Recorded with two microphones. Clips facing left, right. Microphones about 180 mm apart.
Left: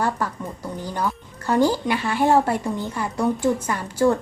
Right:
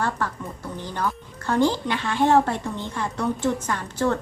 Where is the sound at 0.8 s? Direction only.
10° left (ahead or behind).